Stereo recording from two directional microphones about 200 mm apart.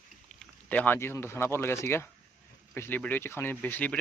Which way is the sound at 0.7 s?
10° left (ahead or behind).